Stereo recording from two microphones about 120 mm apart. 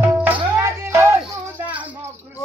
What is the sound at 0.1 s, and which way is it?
Music, 15° right (ahead or behind).